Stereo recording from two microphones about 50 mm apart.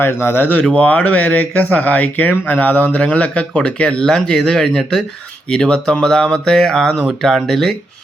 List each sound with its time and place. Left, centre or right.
0.0 s speech: left
0.7 s speech: left; by 7.7 s centre